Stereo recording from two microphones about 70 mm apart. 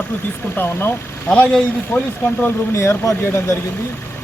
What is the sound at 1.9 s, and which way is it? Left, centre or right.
Speech, left.